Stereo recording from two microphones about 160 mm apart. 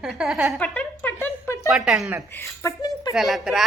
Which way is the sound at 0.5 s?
10° left (ahead or behind).